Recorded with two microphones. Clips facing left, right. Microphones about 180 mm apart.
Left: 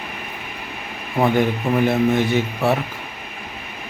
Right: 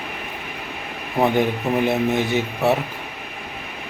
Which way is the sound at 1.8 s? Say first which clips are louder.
Left 4 dB; 20° right (ahead or behind).